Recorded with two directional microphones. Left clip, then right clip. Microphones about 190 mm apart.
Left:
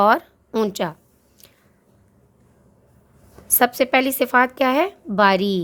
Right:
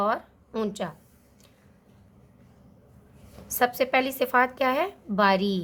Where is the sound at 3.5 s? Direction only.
30° left (ahead or behind).